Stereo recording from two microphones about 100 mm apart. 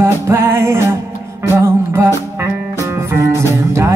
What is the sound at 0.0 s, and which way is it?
Music, 25° right (ahead or behind).